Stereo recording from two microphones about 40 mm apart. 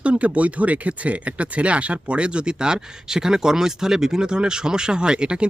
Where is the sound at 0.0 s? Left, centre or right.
Right.